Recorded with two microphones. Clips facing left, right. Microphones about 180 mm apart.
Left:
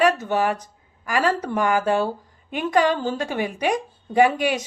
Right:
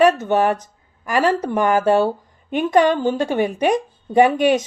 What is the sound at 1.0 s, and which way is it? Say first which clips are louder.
A woman's voice: right 4 dB; 25° right (ahead or behind).